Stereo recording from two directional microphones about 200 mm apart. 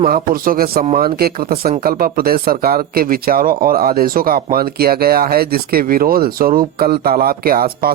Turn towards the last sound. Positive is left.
turn(degrees=-50)  # may be behind; listen again after turning